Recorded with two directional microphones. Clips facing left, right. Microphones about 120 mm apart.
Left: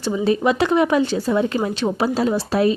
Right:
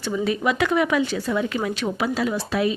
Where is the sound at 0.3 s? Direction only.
30° left (ahead or behind).